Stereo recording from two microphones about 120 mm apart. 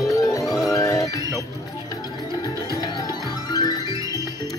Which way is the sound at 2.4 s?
30° left (ahead or behind).